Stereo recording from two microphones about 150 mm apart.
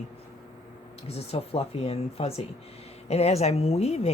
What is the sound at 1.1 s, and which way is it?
A woman's voice, 40° left (ahead or behind).